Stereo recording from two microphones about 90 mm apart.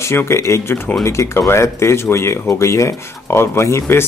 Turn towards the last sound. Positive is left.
turn(degrees=30)  # may be behind; listen again after turning